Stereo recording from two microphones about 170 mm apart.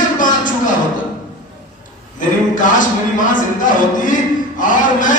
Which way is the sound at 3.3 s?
50° left (ahead or behind).